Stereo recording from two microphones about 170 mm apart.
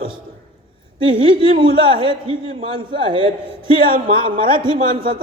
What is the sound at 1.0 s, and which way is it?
Speech, 30° right (ahead or behind).